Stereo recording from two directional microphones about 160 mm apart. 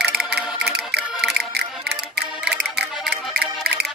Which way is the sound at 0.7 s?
90° right.